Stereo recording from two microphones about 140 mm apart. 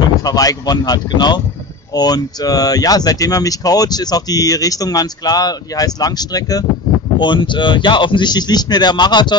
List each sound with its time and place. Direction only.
0.2 s speech: 25° left (ahead or behind)